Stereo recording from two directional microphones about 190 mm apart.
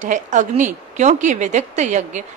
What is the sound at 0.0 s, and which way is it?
A woman's voice, 40° right (ahead or behind).